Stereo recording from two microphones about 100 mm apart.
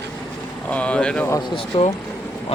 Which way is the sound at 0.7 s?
10° left (ahead or behind).